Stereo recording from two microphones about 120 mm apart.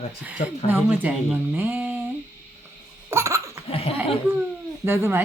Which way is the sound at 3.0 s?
25° right (ahead or behind).